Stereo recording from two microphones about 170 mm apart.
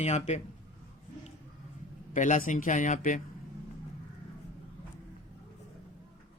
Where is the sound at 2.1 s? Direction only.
50° left (ahead or behind).